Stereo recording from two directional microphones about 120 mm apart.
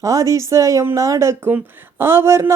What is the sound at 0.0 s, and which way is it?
Speech, 25° right (ahead or behind).